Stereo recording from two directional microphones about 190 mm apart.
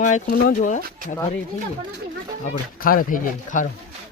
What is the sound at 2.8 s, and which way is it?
Speech, 50° left (ahead or behind).